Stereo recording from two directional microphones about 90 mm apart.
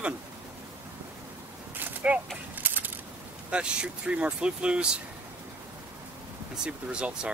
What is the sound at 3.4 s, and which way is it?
Speech, 10° right (ahead or behind).